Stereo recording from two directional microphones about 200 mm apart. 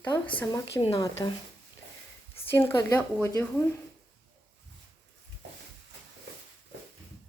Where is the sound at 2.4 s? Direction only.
10° left (ahead or behind).